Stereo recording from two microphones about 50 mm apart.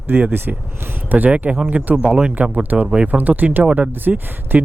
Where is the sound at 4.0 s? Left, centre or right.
Right.